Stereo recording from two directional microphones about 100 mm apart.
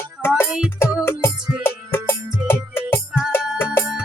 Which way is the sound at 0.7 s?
25° left (ahead or behind).